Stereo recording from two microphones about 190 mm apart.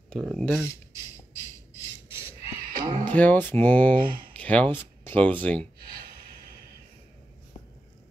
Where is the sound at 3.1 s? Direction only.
10° left (ahead or behind).